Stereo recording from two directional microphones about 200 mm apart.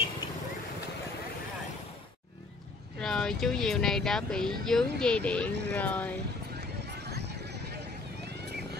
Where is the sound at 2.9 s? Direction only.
5° left (ahead or behind).